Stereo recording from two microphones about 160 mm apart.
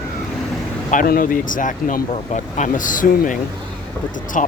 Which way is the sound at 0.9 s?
60° left (ahead or behind).